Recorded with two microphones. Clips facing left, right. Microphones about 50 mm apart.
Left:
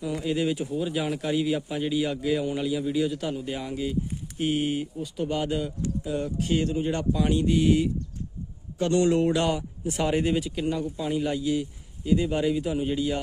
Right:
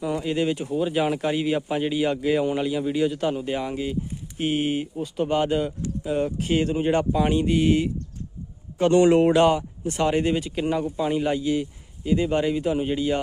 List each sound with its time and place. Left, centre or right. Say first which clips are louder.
0.0 s speech: right 3 dB; centre
6.0 s speech: right 5 dB; right
7.4 s speech: right 1 dB; centre
9.8 s speech: right 3 dB; centre
10.5 s speech: right 3 dB; centre